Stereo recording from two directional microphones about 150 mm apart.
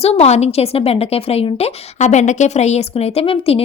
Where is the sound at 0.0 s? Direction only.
45° left (ahead or behind).